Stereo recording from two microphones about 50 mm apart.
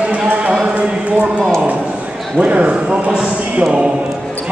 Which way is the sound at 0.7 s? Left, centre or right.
Right.